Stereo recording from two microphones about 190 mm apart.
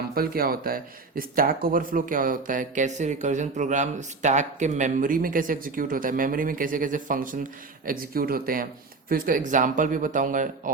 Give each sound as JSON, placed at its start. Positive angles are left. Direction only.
{"t": 0.1, "sound": "speech", "side_deg": -50}